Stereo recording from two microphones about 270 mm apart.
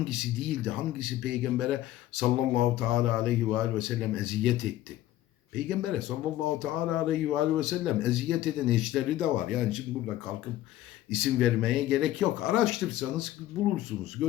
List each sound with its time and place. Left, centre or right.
0.0 s speech: centre